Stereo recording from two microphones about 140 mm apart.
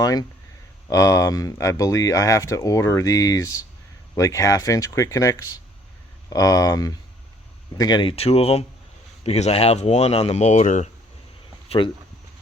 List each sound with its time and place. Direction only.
0.0 s speech: 30° left (ahead or behind)
8.1 s speech: 45° left (ahead or behind); by 10.8 s 60° left (ahead or behind)
11.8 s speech: 35° left (ahead or behind)